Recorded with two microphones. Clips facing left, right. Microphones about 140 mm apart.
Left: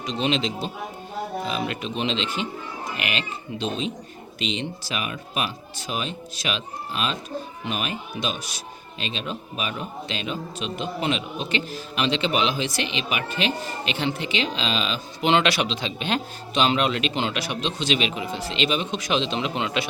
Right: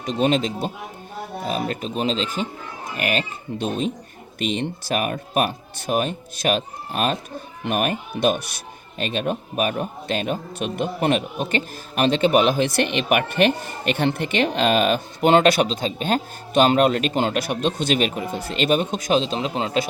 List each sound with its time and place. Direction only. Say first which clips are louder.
0.0 s a man's voice: right 4 dB; 50° right (ahead or behind)